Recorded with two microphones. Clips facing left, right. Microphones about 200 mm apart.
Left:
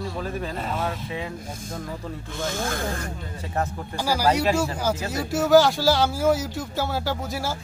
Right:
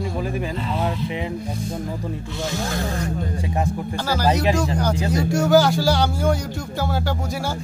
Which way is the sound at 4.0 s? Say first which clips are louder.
Right 1 dB; 10° left (ahead or behind).